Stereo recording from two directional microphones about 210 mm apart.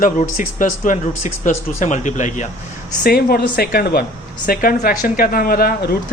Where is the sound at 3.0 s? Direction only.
45° left (ahead or behind).